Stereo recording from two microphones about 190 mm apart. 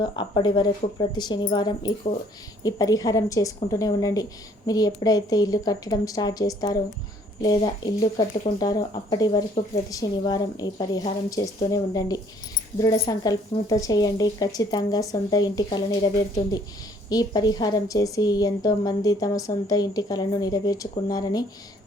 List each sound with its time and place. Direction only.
0.0 s a woman's voice: 25° left (ahead or behind)